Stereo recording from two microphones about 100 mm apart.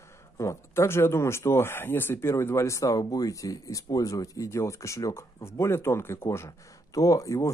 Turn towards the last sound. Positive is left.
turn(degrees=30)  # may be behind; listen again after turning